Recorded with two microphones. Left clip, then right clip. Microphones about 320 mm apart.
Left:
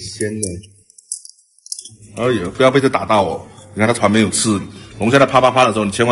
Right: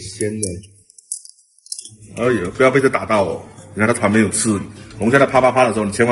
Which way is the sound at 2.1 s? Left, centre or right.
Left.